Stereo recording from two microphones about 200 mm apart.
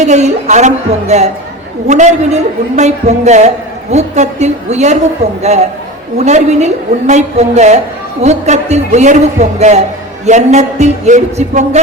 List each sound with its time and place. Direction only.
0.0 s a woman's voice: 35° right (ahead or behind)